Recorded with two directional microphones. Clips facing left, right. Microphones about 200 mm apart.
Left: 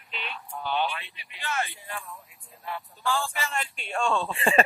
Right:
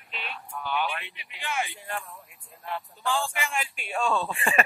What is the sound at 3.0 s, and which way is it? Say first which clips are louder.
Speech: even; 15° right (ahead or behind).